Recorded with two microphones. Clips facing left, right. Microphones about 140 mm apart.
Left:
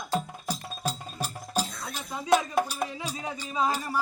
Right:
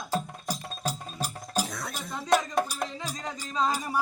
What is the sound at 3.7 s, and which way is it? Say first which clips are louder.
Speech: even; 15° right (ahead or behind).